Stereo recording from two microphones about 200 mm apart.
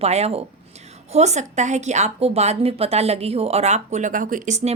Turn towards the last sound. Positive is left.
turn(degrees=-35)  # may be behind; listen again after turning